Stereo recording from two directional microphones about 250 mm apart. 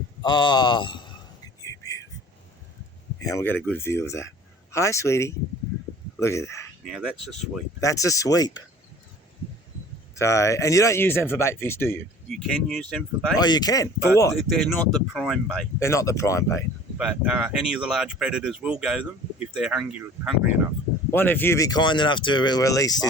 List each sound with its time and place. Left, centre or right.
0.2 s a man's voice: centre
3.2 s speech: centre
6.8 s speech: centre
7.8 s speech: centre
10.2 s speech: centre
13.4 s speech: centre
14.3 s speech: centre
17.0 s speech: centre
21.1 s speech: centre